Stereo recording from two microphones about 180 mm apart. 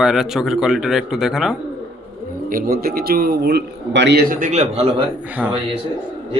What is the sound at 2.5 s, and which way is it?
A man's voice, 55° right (ahead or behind).